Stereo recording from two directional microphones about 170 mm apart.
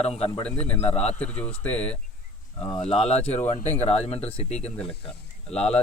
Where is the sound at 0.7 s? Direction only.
40° left (ahead or behind).